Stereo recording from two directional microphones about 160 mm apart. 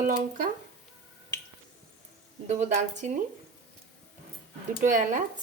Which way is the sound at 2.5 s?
45° right (ahead or behind).